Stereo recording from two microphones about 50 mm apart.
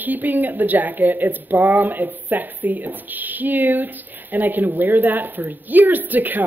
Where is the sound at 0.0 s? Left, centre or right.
Right.